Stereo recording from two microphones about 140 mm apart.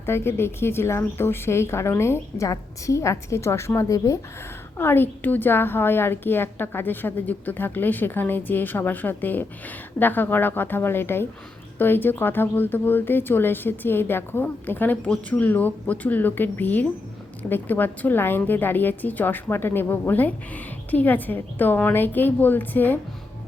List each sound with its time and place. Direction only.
0.0 s a woman's voice: 15° left (ahead or behind)